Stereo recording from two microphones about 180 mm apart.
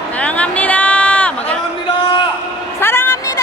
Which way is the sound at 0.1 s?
10° left (ahead or behind).